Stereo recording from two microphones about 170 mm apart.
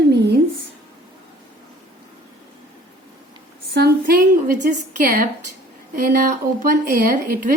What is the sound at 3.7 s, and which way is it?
A woman's voice, 65° right (ahead or behind).